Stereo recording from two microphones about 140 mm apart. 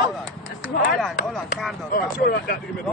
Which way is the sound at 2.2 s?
90° left.